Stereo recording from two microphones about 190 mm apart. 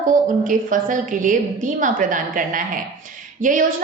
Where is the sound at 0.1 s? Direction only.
45° right (ahead or behind).